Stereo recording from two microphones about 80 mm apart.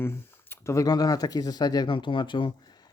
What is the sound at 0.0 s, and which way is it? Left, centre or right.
Speech, left.